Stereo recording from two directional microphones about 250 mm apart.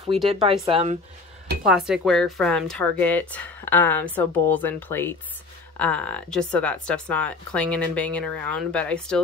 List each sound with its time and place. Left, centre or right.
0.3 s speech: right
1.9 s speech: centre